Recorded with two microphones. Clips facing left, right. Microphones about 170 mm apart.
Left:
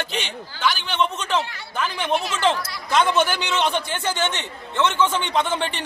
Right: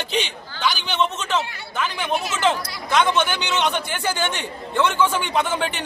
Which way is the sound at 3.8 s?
25° left (ahead or behind).